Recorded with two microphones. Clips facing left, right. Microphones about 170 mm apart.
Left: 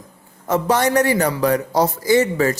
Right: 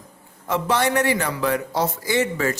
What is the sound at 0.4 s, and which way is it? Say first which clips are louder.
A man's voice: left 4 dB; 45° left (ahead or behind).